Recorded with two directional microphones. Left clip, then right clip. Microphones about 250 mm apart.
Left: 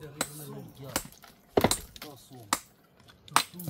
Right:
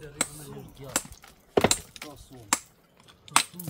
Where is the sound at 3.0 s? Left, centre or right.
Centre.